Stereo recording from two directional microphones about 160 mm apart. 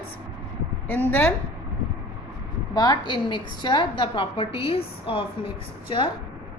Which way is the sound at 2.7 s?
25° left (ahead or behind).